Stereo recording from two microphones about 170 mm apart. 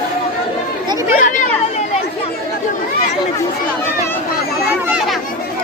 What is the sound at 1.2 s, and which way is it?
Chatter, 50° left (ahead or behind).